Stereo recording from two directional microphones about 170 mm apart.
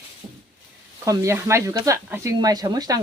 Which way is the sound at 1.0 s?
15° right (ahead or behind).